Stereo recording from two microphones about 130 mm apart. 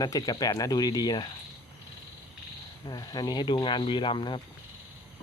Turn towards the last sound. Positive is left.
turn(degrees=40)  # may be behind; listen again after turning